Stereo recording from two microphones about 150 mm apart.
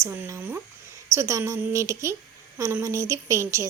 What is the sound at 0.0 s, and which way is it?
A woman's voice, 15° right (ahead or behind).